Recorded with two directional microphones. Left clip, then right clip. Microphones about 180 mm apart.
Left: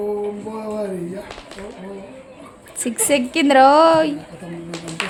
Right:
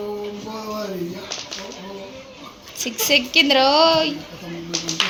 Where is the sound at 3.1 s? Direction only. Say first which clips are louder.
Right 1 dB; 45° left (ahead or behind).